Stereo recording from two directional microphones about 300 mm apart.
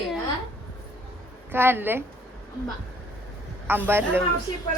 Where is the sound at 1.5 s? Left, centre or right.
Centre.